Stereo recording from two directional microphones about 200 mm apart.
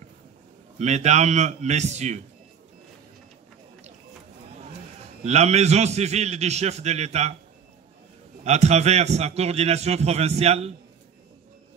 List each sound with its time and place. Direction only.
0.7 s a man's voice: 35° right (ahead or behind)
5.2 s a man's voice: 35° right (ahead or behind)
8.5 s a man's voice: 35° right (ahead or behind)